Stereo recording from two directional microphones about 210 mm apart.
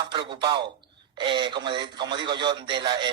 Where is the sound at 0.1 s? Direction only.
20° right (ahead or behind).